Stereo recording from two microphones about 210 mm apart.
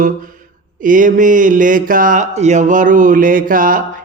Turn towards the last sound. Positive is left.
turn(degrees=-40)  # may be behind; listen again after turning